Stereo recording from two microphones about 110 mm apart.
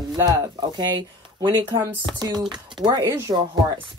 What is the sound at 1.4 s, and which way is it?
Speech, 40° right (ahead or behind).